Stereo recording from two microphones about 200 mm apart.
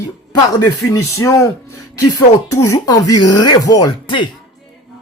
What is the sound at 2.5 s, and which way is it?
Speech, 15° left (ahead or behind).